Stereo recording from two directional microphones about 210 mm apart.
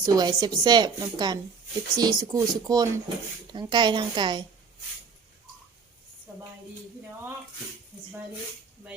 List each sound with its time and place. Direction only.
0.0 s a woman's voice: 20° right (ahead or behind)